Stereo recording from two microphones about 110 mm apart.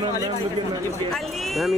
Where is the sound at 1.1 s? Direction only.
Centre (ahead or behind).